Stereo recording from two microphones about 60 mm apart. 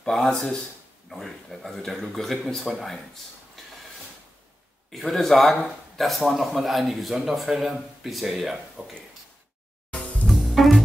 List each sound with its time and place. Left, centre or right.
0.0 s speech: centre
4.9 s speech: centre
9.9 s music: left
10.2 s music: centre